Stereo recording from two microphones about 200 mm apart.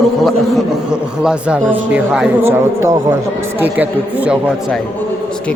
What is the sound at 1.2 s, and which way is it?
A man's voice, 5° right (ahead or behind).